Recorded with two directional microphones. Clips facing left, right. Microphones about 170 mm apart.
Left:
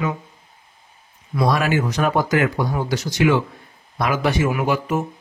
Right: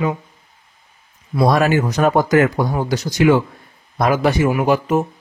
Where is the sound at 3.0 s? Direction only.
15° right (ahead or behind).